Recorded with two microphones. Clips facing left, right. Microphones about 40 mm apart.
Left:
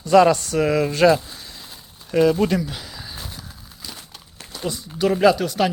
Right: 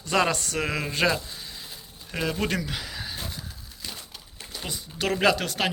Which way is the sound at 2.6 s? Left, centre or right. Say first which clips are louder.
Left 4 dB; right.